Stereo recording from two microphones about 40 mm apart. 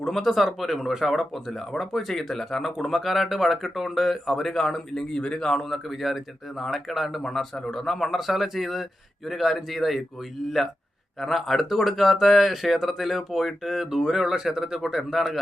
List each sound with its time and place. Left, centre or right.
0.0 s speech: centre
5.2 s speech: centre
5.5 s speech: centre
11.2 s speech: centre